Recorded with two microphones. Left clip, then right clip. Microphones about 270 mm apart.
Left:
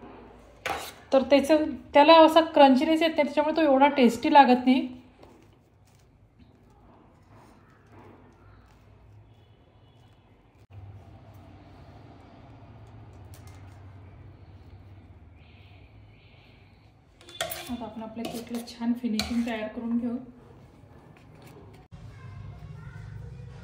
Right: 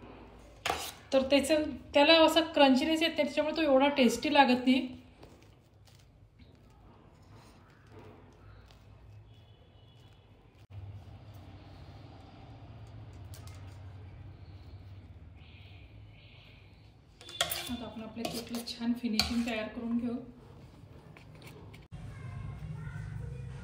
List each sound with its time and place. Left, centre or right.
0.8 s a woman's voice: centre
17.3 s dishes: centre
21.1 s a sound: centre